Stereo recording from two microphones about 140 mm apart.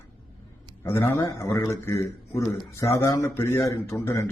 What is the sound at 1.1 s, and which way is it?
A man's voice, 20° left (ahead or behind).